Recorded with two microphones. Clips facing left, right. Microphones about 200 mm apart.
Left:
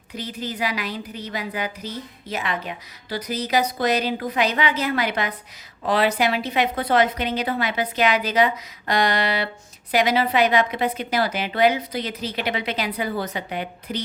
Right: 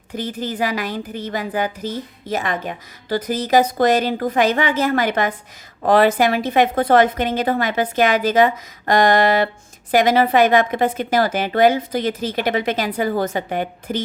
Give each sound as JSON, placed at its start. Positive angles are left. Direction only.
{"t": 0.1, "sound": "a woman's voice", "side_deg": -50}